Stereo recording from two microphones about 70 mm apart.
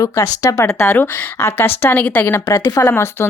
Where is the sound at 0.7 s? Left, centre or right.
Left.